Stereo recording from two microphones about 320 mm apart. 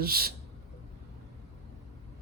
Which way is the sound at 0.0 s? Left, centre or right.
Right.